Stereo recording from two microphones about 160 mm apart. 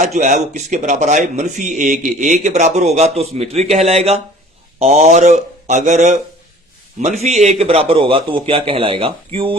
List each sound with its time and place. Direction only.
0.0 s a man's voice: 45° right (ahead or behind)